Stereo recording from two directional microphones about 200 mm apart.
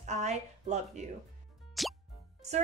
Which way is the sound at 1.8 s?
Centre (ahead or behind).